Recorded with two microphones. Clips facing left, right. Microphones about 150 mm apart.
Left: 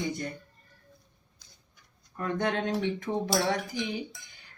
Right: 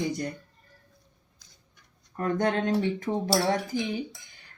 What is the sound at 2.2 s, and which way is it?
Speech, 40° right (ahead or behind).